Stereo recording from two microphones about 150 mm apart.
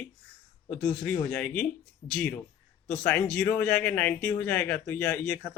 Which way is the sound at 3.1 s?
10° left (ahead or behind).